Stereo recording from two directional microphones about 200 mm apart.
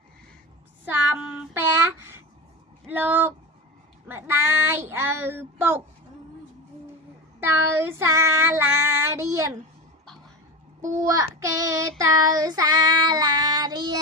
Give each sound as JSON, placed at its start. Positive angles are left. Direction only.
{"t": 0.9, "sound": "child singing", "side_deg": -10}
{"t": 7.4, "sound": "child singing", "side_deg": -10}
{"t": 10.8, "sound": "child singing", "side_deg": -15}